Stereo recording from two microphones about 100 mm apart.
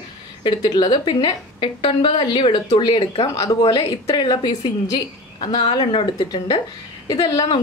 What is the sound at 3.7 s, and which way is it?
Speech, 50° left (ahead or behind).